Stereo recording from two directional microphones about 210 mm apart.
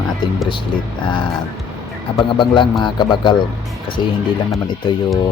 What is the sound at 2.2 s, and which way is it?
Speech, 20° left (ahead or behind).